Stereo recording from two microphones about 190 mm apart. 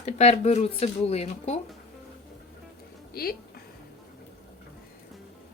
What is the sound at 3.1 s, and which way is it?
Speech, 50° left (ahead or behind).